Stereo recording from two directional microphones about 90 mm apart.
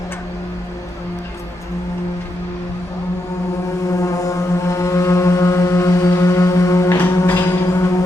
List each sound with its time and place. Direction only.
3.9 s vehicle: 40° left (ahead or behind)
7.2 s music: 30° left (ahead or behind)